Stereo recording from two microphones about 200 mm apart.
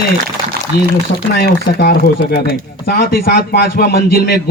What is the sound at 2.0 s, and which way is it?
A man's voice, 55° left (ahead or behind).